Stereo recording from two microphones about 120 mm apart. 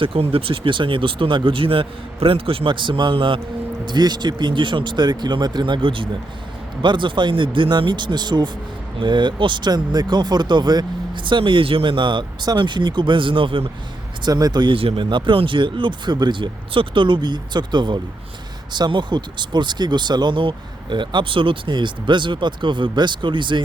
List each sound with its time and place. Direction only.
0.0 s speech: 50° right (ahead or behind)
14.3 s speech: 35° right (ahead or behind)